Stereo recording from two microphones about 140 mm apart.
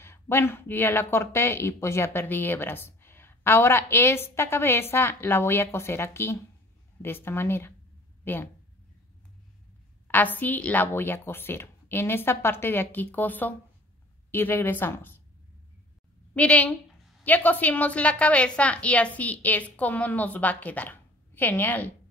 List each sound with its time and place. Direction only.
0.0 s speech: 15° left (ahead or behind)
10.0 s speech: 15° left (ahead or behind)
16.3 s speech: 10° left (ahead or behind)